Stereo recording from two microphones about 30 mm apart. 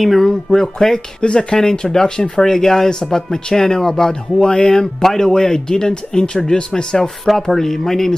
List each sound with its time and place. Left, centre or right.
0.2 s speech: centre
1.2 s speech: left
1.6 s speech: left
4.1 s speech: left; by 8.1 s centre